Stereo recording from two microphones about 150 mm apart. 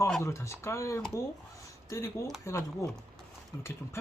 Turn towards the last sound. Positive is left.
turn(degrees=15)  # may be behind; listen again after turning